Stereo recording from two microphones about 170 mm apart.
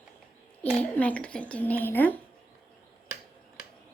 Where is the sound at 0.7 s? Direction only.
10° left (ahead or behind).